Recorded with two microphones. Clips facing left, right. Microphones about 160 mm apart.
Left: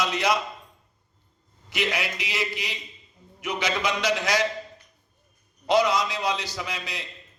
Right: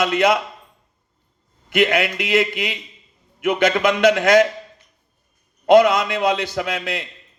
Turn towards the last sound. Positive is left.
turn(degrees=-55)  # may be behind; listen again after turning